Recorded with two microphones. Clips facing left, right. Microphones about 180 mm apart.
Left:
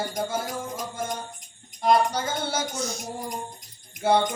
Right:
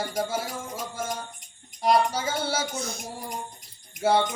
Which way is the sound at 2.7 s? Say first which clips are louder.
Left 2 dB; 55° right (ahead or behind).